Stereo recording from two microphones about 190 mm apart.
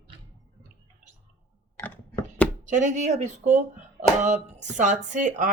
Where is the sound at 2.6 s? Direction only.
40° right (ahead or behind).